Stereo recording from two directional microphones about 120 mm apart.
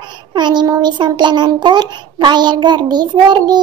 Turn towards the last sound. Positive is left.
turn(degrees=-35)  # may be behind; listen again after turning